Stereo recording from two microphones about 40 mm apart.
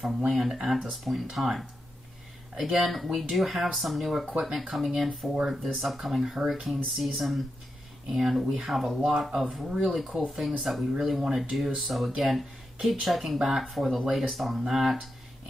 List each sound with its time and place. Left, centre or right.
0.3 s speech: centre
5.3 s speech: centre
5.6 s speech: centre
8.1 s speech: centre
9.7 s speech: centre
9.9 s speech: centre